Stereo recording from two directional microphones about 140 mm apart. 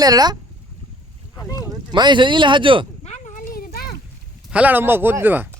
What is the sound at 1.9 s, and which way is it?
Speech, 35° right (ahead or behind).